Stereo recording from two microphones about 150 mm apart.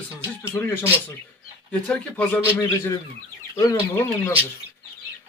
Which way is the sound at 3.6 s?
15° left (ahead or behind).